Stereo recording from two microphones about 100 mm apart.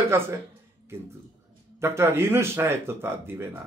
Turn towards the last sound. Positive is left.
turn(degrees=-25)  # may be behind; listen again after turning